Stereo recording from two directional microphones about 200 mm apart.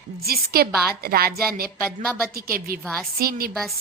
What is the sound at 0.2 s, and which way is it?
A woman's voice, 50° right (ahead or behind).